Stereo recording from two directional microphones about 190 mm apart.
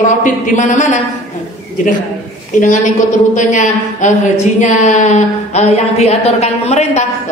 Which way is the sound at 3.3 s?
40° left (ahead or behind).